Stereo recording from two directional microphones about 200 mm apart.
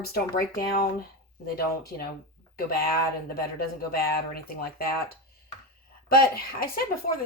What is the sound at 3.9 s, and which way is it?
Speech, 50° left (ahead or behind).